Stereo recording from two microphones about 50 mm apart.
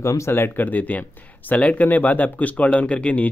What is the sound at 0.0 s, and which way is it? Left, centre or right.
Speech, left.